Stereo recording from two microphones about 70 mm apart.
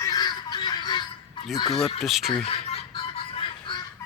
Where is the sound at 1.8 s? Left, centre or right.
Centre.